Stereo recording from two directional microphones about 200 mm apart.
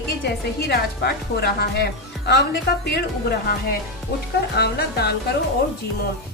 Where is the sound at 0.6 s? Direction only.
50° left (ahead or behind).